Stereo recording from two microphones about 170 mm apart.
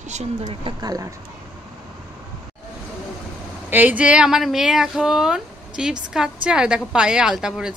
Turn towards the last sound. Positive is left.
turn(degrees=-5)  # may be behind; listen again after turning